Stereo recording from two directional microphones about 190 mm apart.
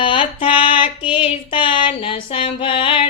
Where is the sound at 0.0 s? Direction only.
25° left (ahead or behind).